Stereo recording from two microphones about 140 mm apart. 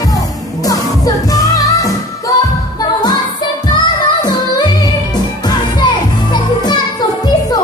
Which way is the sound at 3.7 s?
30° left (ahead or behind).